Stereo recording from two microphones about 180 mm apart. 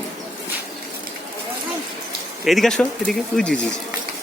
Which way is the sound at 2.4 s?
Centre (ahead or behind).